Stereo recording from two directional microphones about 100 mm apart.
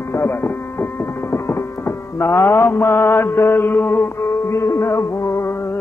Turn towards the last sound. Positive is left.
turn(degrees=25)  # may be behind; listen again after turning